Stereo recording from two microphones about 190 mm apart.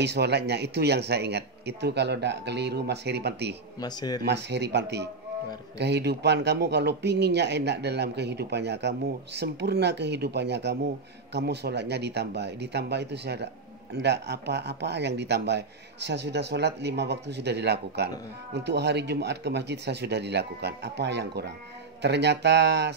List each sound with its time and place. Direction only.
0.0 s speech: 60° right (ahead or behind)
3.8 s speech: 20° left (ahead or behind)
4.2 s speech: 65° right (ahead or behind)